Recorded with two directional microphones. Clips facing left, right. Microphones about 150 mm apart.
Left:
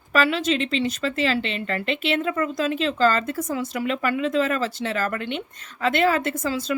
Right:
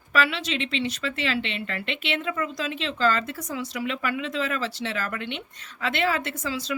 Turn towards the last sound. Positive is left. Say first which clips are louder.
# left 5 dB
turn(degrees=50)  # may be behind; listen again after turning